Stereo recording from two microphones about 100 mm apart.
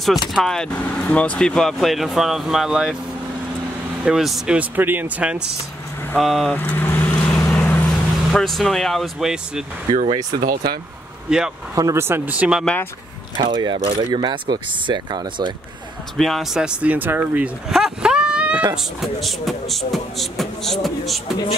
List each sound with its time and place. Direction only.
0.3 s speech: 5° left (ahead or behind)
4.0 s speech: 5° right (ahead or behind)
4.6 s speech: 20° right (ahead or behind)
6.1 s speech: centre (ahead or behind)
6.5 s vehicle: 20° left (ahead or behind)
7.5 s speech: 15° left (ahead or behind); by 9.7 s 5° right (ahead or behind)
9.8 s speech: 85° right
11.2 s speech: 5° right (ahead or behind)
11.7 s speech: 30° right (ahead or behind)
12.4 s speech: 10° right (ahead or behind)
13.4 s speech: 50° right (ahead or behind)
16.2 s speech: centre (ahead or behind); by 17.5 s 20° right (ahead or behind)
17.6 s a sound: 5° right (ahead or behind)
18.9 s speech: centre (ahead or behind)